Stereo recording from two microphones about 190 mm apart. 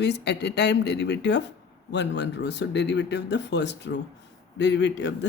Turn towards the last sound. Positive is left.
turn(degrees=70)  # may be behind; listen again after turning